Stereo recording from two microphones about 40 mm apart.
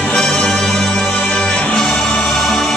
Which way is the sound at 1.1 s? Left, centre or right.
Left.